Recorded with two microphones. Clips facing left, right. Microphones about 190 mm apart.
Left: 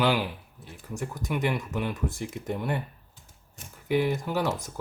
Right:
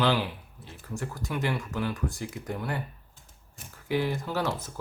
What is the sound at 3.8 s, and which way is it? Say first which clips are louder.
Speech: left 3 dB; 15° left (ahead or behind).